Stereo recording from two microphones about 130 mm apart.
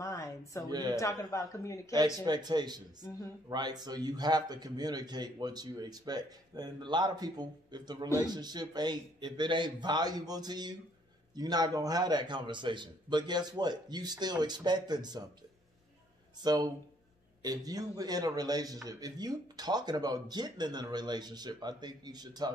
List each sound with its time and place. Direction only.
0.0 s a sound: 25° left (ahead or behind)
0.7 s a man's voice: 30° right (ahead or behind)
0.9 s a man's voice: 25° left (ahead or behind)
2.1 s a man's voice: 30° right (ahead or behind)
16.3 s a man's voice: 30° right (ahead or behind)